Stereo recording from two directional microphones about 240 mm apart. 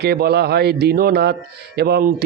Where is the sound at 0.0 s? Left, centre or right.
Right.